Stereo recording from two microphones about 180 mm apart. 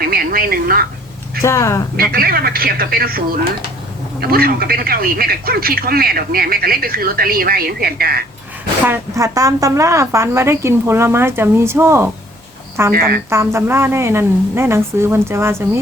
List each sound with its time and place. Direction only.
0.0 s a sound: 55° right (ahead or behind)
1.4 s speech: 15° left (ahead or behind)
2.0 s a man's voice: 55° right (ahead or behind)
8.9 s a woman's voice: 15° right (ahead or behind)
12.9 s a man's voice: 55° right (ahead or behind)
13.3 s a woman's voice: 15° right (ahead or behind)